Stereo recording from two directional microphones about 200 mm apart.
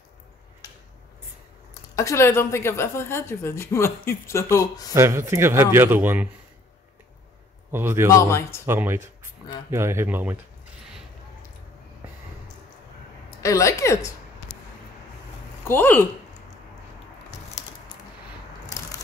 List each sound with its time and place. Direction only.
1.7 s a woman's voice: 15° left (ahead or behind)
4.9 s speech: 15° right (ahead or behind)
7.7 s speech: 10° right (ahead or behind)
8.1 s a woman's voice: 15° left (ahead or behind)
8.6 s speech: 10° right (ahead or behind)
13.4 s a woman's voice: 15° left (ahead or behind)
15.6 s a woman's voice: 10° left (ahead or behind)
17.6 s a sound: 35° left (ahead or behind)